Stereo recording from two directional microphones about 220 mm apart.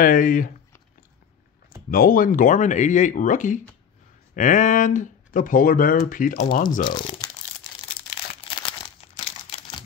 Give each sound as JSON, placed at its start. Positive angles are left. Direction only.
{"t": 0.0, "sound": "speech", "side_deg": 40}
{"t": 1.9, "sound": "speech", "side_deg": 40}
{"t": 6.8, "sound": "speech", "side_deg": 20}
{"t": 8.4, "sound": "crumpling", "side_deg": 20}